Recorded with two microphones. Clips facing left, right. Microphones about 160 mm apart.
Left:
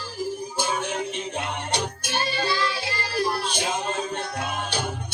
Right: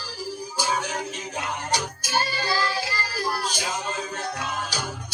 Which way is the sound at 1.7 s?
60° left (ahead or behind).